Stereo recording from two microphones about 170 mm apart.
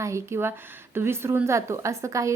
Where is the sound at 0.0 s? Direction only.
15° right (ahead or behind).